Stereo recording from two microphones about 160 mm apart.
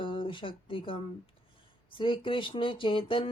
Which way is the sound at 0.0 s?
35° left (ahead or behind).